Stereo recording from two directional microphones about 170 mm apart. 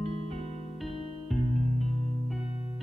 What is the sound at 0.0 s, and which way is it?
Music, 35° right (ahead or behind).